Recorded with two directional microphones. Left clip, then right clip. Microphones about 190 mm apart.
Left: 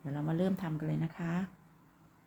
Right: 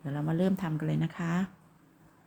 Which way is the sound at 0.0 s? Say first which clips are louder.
Right 3 dB; 10° right (ahead or behind).